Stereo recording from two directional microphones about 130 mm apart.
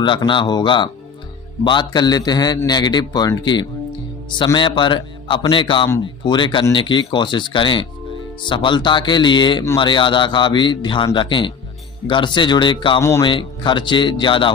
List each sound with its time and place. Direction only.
0.0 s a man's voice: 40° left (ahead or behind)